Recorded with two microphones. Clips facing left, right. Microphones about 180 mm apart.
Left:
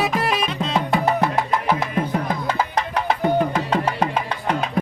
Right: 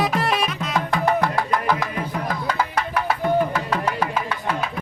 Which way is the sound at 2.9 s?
30° left (ahead or behind).